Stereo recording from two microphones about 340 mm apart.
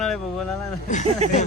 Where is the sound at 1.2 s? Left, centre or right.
Centre.